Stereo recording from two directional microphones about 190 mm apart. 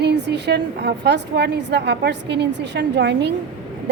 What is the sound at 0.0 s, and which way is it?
A woman's voice, 60° right (ahead or behind).